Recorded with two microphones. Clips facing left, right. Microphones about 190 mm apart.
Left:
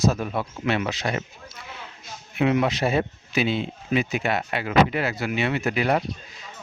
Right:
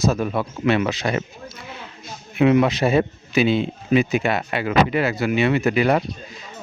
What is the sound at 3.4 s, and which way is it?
Speech, 85° right.